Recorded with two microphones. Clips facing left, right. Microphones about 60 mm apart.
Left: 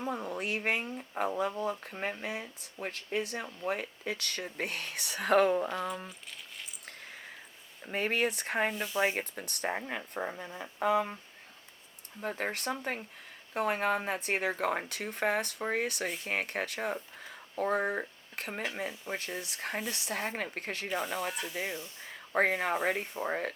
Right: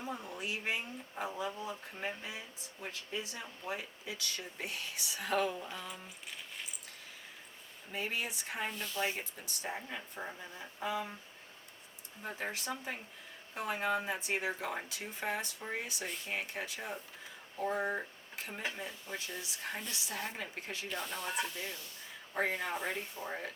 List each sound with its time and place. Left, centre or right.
0.0 s speech: left
6.8 s a sound: left
7.9 s speech: left
12.3 s speech: left
21.1 s speech: left
22.3 s speech: left